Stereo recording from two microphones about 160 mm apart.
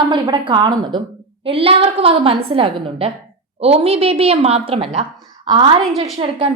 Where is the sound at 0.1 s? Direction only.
30° right (ahead or behind).